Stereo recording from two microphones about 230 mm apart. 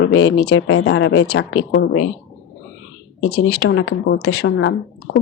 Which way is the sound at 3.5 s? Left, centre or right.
Left.